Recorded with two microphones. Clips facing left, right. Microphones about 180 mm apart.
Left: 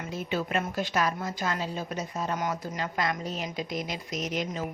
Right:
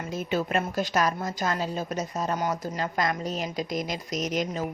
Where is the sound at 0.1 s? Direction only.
45° right (ahead or behind).